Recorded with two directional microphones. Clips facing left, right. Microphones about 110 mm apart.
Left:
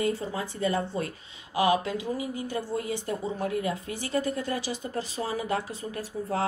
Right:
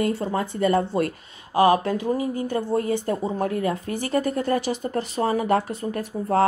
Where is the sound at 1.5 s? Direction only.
45° right (ahead or behind).